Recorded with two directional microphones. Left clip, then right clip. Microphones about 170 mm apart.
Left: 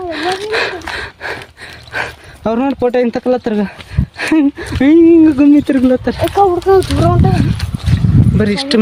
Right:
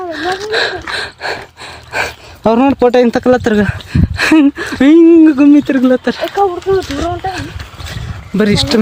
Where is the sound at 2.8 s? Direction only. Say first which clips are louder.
Right 4 dB; 75° right (ahead or behind); by 3.7 s 55° right (ahead or behind).